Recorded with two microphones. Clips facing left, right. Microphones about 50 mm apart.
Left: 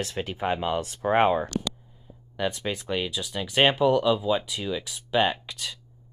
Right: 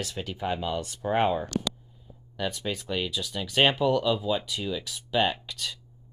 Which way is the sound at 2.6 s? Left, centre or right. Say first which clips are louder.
Left 2 dB; centre.